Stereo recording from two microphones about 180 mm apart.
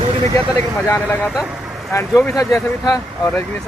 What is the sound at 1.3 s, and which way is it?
Speech, 5° right (ahead or behind).